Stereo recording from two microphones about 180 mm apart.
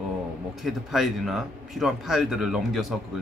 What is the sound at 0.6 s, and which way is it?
Speech, centre (ahead or behind).